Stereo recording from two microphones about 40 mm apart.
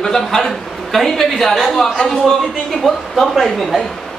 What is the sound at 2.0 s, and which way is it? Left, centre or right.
Speech, centre.